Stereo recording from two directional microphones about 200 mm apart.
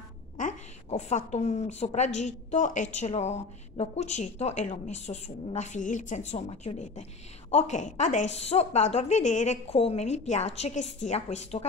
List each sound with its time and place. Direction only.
0.4 s a woman's voice: 35° left (ahead or behind)